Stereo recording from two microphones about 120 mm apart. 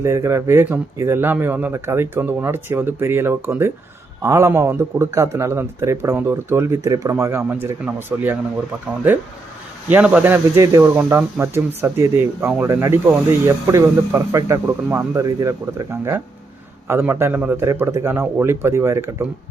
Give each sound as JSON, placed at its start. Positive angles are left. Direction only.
{"t": 0.0, "sound": "a man's voice", "side_deg": -25}
{"t": 9.9, "sound": "a man's voice", "side_deg": -10}
{"t": 10.8, "sound": "a man's voice", "side_deg": -15}